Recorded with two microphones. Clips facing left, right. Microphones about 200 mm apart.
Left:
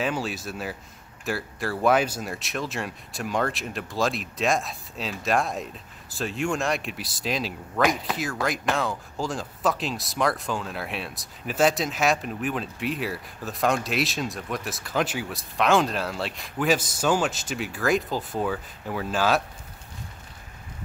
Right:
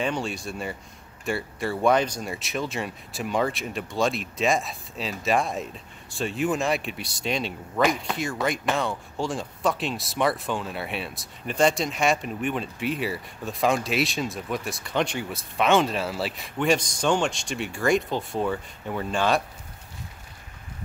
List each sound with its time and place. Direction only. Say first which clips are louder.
0.0 s speech: even; 5° left (ahead or behind)